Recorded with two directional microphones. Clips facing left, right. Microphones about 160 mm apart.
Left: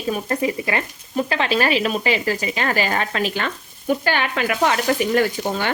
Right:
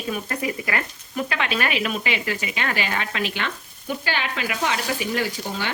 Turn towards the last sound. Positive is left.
turn(degrees=50)  # may be behind; listen again after turning